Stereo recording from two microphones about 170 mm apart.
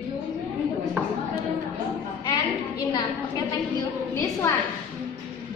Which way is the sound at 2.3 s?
25° left (ahead or behind).